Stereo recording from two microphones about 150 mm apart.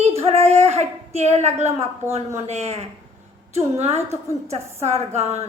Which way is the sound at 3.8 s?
45° right (ahead or behind).